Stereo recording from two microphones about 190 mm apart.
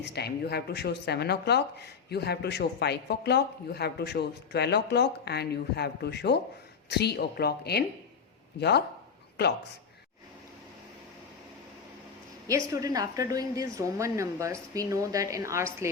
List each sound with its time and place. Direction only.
0.0 s speech: 60° left (ahead or behind)
12.5 s a woman's voice: 15° right (ahead or behind)